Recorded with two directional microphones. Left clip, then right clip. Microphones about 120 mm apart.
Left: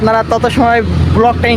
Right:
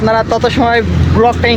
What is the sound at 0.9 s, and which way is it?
Vehicle, 45° left (ahead or behind).